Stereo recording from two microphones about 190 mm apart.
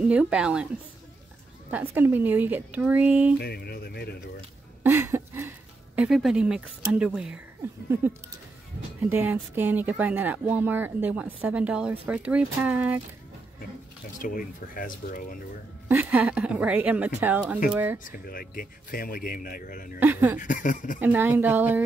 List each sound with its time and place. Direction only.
0.0 s a woman's voice: 5° right (ahead or behind)
1.7 s speech: 10° right (ahead or behind)
3.3 s speech: 55° left (ahead or behind)
4.8 s a sound: 10° right (ahead or behind)
5.9 s a woman's voice: centre (ahead or behind)
9.1 s speech: 10° right (ahead or behind)
14.2 s speech: 45° left (ahead or behind)
15.9 s speech: 10° right (ahead or behind)
17.9 s speech: 45° left (ahead or behind)
20.0 s speech: 10° right (ahead or behind)
20.3 s speech: 45° left (ahead or behind)
21.0 s speech: 10° right (ahead or behind)